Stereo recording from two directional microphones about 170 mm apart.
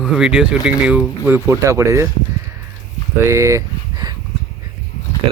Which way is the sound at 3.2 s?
15° right (ahead or behind).